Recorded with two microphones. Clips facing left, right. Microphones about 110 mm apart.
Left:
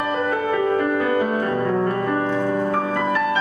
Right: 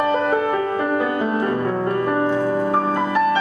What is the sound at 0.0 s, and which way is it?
Music, 30° right (ahead or behind).